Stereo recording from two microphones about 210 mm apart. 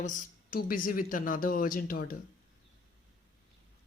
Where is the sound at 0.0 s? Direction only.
35° left (ahead or behind).